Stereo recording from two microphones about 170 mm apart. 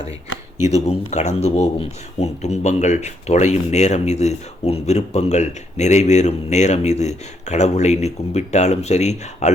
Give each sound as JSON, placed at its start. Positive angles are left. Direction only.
{"t": 0.6, "sound": "speech", "side_deg": 40}